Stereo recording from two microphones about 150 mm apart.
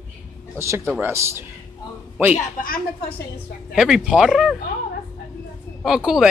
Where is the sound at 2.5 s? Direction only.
70° left (ahead or behind).